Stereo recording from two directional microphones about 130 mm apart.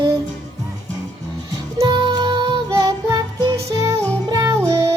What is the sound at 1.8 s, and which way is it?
Music, 30° right (ahead or behind).